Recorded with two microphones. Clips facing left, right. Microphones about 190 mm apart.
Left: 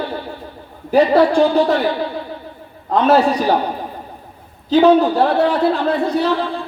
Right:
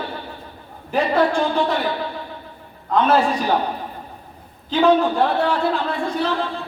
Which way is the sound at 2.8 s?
35° left (ahead or behind).